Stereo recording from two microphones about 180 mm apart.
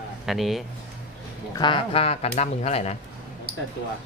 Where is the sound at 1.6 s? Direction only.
25° left (ahead or behind).